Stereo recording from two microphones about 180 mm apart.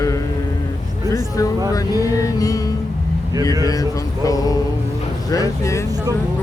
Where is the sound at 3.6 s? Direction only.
20° left (ahead or behind).